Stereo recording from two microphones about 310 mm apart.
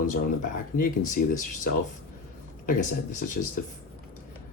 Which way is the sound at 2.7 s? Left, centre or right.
Left.